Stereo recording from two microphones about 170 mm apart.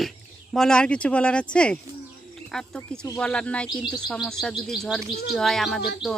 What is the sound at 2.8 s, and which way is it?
Speech, 20° left (ahead or behind).